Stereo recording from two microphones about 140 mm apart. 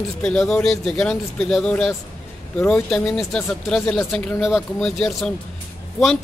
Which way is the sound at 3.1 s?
Centre (ahead or behind).